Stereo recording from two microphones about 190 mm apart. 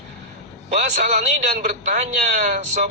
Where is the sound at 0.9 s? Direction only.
40° right (ahead or behind).